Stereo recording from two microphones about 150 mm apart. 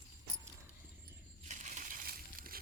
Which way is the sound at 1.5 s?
55° right (ahead or behind).